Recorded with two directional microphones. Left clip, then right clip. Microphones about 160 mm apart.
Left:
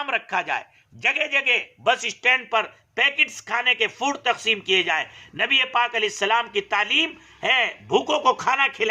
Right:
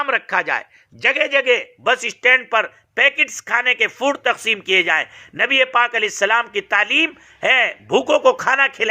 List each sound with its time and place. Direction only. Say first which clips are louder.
0.0 s a man's voice: right 6 dB; 30° right (ahead or behind)